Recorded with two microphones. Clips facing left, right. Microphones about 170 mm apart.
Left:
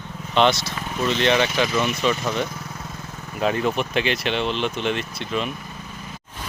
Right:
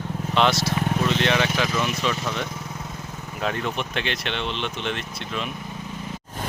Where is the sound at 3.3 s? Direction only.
5° left (ahead or behind).